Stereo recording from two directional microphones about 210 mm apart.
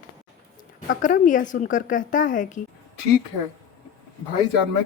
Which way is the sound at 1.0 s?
40° left (ahead or behind).